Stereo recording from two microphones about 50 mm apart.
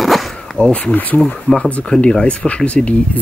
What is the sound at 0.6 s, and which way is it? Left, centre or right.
Speech, centre.